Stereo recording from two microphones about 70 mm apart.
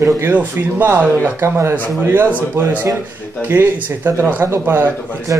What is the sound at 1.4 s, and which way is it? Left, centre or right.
Speech, right.